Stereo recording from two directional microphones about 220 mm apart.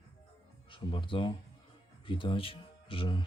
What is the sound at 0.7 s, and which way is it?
Speech, 20° left (ahead or behind).